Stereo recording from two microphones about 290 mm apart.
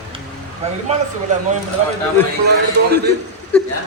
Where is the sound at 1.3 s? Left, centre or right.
Right.